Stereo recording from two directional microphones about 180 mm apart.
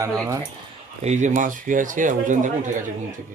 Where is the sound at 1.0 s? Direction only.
40° right (ahead or behind).